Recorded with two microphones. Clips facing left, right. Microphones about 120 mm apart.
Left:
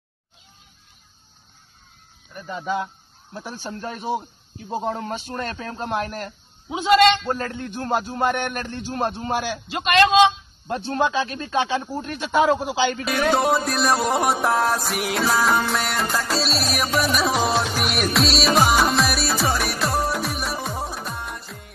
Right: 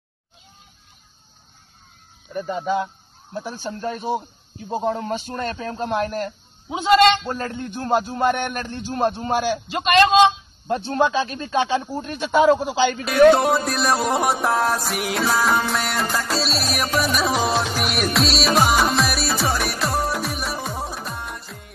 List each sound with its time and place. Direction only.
2.5 s a man's voice: 35° right (ahead or behind)
11.1 s speech: 30° right (ahead or behind)
13.0 s music: centre (ahead or behind)